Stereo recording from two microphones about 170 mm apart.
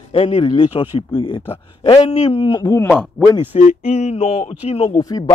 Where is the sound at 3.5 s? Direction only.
40° left (ahead or behind).